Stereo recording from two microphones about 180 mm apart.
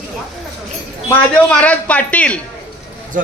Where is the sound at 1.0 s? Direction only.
10° left (ahead or behind).